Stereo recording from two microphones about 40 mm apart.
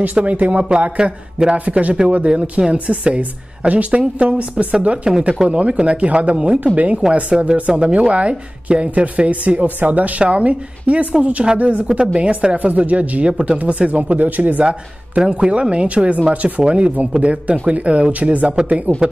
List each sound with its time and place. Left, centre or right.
0.0 s speech: right
5.1 s speech: centre
5.5 s speech: right
13.3 s speech: centre
13.6 s speech: right
14.6 s speech: right